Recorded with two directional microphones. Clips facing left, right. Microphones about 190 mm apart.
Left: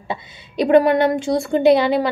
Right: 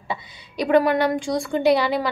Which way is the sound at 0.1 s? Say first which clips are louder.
Left 3 dB; 25° left (ahead or behind).